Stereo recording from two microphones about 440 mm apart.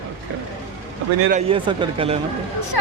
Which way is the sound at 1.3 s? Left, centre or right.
Centre.